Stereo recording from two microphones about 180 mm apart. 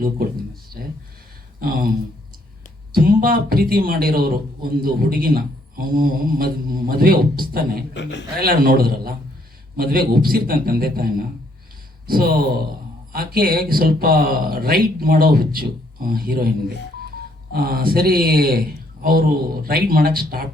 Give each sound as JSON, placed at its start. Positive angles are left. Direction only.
{"t": 1.5, "sound": "a sound", "side_deg": -55}
{"t": 2.9, "sound": "a man's voice", "side_deg": -55}
{"t": 19.6, "sound": "a man's voice", "side_deg": -55}